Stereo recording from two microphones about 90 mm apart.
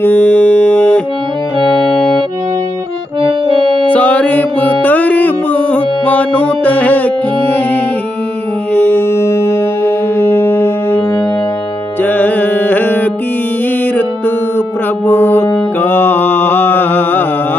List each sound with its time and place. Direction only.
0.0 s music: 20° left (ahead or behind)
3.2 s accordion: 90° right; by 3.8 s 70° right (ahead or behind)
3.8 s music: 20° left (ahead or behind)
12.0 s music: 20° left (ahead or behind)
15.0 s music: 25° left (ahead or behind)
15.8 s mantra: 25° left (ahead or behind)